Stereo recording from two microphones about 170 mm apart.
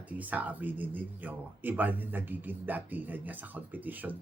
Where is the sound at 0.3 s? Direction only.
10° right (ahead or behind).